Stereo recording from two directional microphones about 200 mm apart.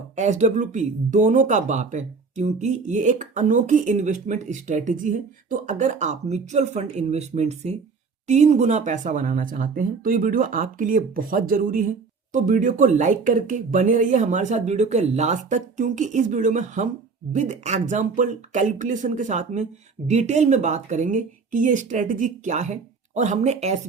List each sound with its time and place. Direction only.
0.2 s speech: 35° right (ahead or behind)